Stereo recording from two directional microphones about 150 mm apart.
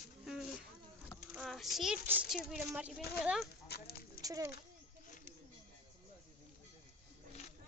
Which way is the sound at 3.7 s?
90° left.